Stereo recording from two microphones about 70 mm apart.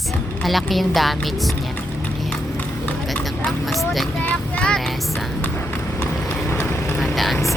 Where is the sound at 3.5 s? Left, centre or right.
Centre.